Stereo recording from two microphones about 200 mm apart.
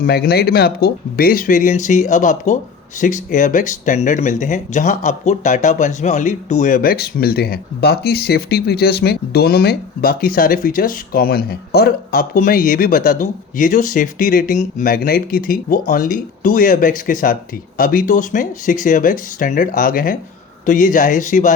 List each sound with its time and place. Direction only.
0.0 s speech: 50° left (ahead or behind)